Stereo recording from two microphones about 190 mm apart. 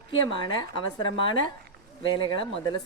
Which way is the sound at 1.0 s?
25° left (ahead or behind).